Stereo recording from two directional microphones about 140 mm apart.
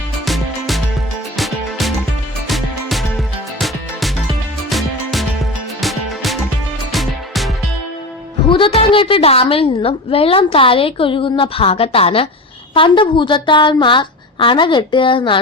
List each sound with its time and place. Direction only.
0.3 s music: centre (ahead or behind)
4.7 s music: centre (ahead or behind)
8.4 s a woman's voice: 40° left (ahead or behind)